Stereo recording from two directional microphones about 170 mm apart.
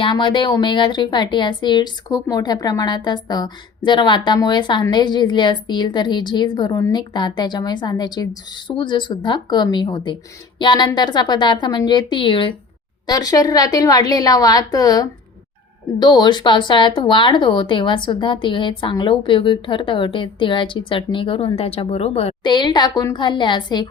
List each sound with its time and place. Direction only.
0.0 s speech: 30° left (ahead or behind)